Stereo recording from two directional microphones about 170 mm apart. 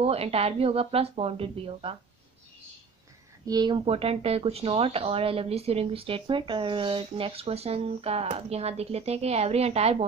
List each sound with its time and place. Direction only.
0.0 s speech: 35° right (ahead or behind)
3.4 s speech: 25° right (ahead or behind)